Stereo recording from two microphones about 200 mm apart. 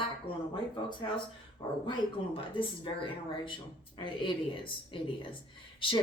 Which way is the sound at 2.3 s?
25° left (ahead or behind).